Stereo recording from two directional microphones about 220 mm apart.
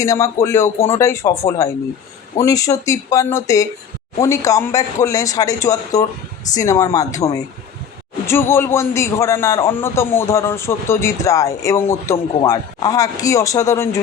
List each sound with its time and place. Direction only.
0.0 s a man's voice: 15° left (ahead or behind)
8.3 s a man's voice: 10° left (ahead or behind)